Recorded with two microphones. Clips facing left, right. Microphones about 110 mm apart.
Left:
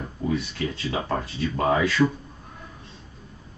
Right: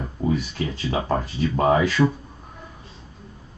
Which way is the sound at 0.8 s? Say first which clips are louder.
Right 5 dB; 25° right (ahead or behind).